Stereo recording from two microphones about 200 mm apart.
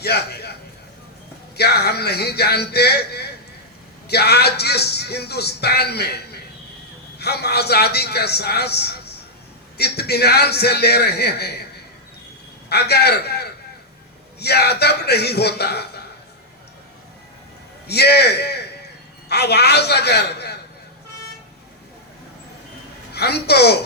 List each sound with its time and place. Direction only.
0.0 s a man's voice: 55° left (ahead or behind)
1.5 s a man's voice: 55° left (ahead or behind)
12.6 s a man's voice: 55° left (ahead or behind)
17.8 s a man's voice: 55° left (ahead or behind)
23.1 s a man's voice: 55° left (ahead or behind)